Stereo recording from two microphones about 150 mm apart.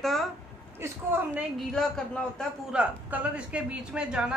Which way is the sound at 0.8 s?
15° right (ahead or behind).